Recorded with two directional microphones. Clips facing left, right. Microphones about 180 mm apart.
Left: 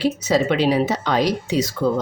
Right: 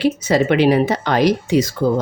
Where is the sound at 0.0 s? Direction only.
60° right (ahead or behind).